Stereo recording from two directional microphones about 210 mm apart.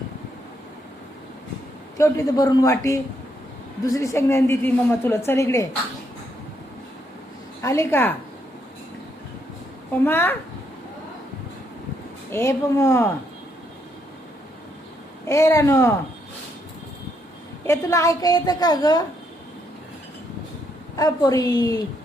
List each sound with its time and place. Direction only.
2.0 s a woman's voice: 15° left (ahead or behind)
7.6 s a woman's voice: 15° left (ahead or behind)
9.9 s a woman's voice: 10° left (ahead or behind)
12.3 s a woman's voice: 15° left (ahead or behind)
15.3 s a woman's voice: 15° left (ahead or behind)
17.7 s a woman's voice: 15° left (ahead or behind)
20.9 s a woman's voice: 15° left (ahead or behind)